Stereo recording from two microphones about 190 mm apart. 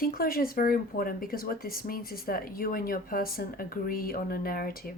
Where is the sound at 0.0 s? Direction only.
50° left (ahead or behind).